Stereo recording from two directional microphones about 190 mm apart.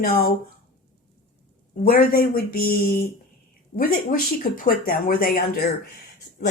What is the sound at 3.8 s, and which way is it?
Speech, 50° left (ahead or behind).